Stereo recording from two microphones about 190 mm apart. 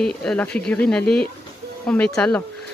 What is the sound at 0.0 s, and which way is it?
Speech, 5° left (ahead or behind).